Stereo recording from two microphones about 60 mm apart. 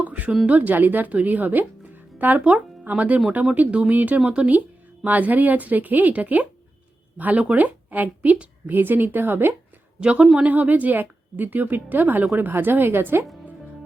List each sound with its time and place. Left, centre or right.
0.0 s a sound: right
0.4 s a woman's voice: right
10.0 s a woman's voice: centre; by 13.2 s right